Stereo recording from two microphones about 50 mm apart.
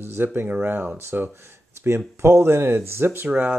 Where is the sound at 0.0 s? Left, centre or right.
Right.